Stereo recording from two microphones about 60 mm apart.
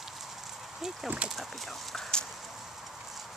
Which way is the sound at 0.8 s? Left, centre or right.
Centre.